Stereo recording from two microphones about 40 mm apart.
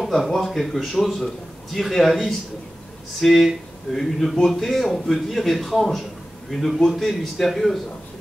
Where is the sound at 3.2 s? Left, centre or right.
Centre.